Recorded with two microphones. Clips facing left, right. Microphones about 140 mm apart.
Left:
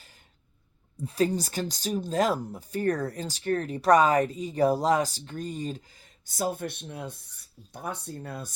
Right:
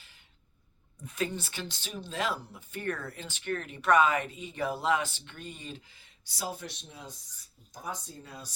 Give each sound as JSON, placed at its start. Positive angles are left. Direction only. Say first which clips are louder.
{"t": 1.0, "sound": "speech", "louder": "left 8 dB", "side_deg": 35}